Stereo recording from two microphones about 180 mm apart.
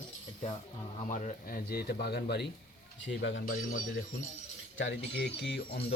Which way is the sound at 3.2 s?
90° left.